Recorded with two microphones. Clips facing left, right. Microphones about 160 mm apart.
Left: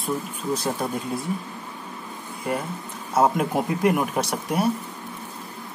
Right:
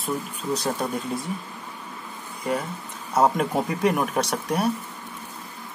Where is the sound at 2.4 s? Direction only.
Centre (ahead or behind).